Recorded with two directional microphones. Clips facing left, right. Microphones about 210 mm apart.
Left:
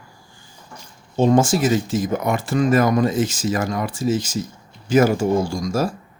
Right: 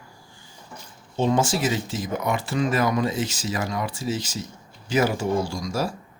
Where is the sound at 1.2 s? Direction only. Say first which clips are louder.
Left 6 dB; 45° left (ahead or behind).